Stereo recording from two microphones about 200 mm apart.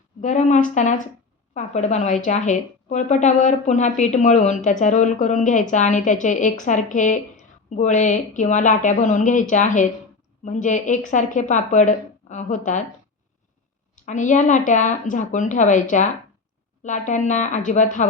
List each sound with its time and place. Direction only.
0.2 s a woman's voice: 35° left (ahead or behind)
13.9 s a woman's voice: 40° left (ahead or behind)